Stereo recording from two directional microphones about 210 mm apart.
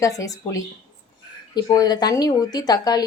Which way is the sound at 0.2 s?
15° left (ahead or behind).